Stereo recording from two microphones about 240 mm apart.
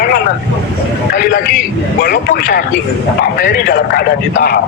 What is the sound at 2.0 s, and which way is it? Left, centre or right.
A man's voice, left.